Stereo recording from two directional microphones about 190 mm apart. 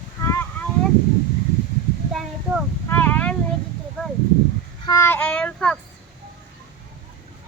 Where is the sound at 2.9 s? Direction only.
10° left (ahead or behind).